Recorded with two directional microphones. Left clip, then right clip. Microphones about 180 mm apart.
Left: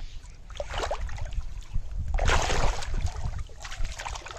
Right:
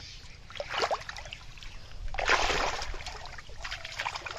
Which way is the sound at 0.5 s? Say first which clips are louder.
Right 1 dB; 50° left (ahead or behind).